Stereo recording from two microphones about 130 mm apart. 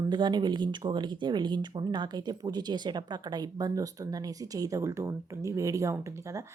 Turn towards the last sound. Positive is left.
turn(degrees=-25)  # may be behind; listen again after turning